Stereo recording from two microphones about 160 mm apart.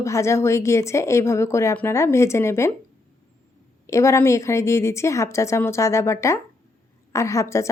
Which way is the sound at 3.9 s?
20° left (ahead or behind).